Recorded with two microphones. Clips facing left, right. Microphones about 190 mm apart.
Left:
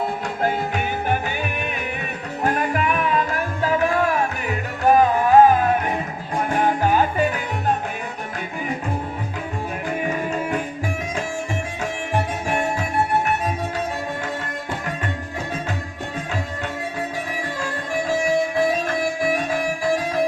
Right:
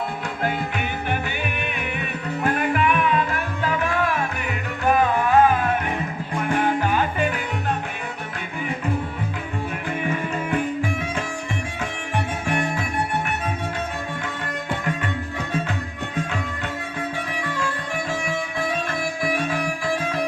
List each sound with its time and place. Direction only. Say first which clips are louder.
2.4 s music: even; 40° left (ahead or behind)
12.1 s music: left 1 dB; 40° left (ahead or behind)
19.2 s music: right 1 dB; 40° left (ahead or behind)